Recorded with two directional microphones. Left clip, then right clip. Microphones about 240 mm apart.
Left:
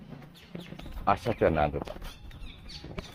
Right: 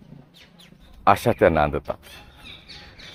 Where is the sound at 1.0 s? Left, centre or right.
Right.